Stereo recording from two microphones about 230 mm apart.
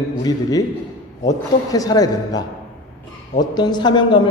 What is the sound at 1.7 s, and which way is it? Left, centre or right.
A man's voice, centre.